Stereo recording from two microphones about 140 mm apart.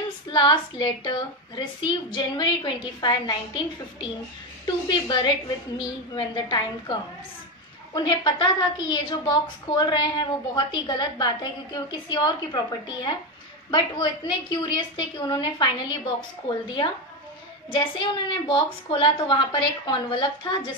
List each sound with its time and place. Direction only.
0.3 s a woman's voice: 35° left (ahead or behind)